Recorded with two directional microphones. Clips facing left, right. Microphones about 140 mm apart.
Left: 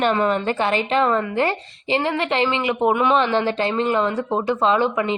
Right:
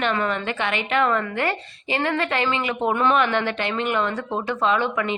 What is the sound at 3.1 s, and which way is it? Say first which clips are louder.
Speech: left 3 dB; 30° left (ahead or behind).